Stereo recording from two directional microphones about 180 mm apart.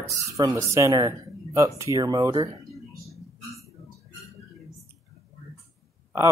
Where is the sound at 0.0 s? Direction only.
15° right (ahead or behind).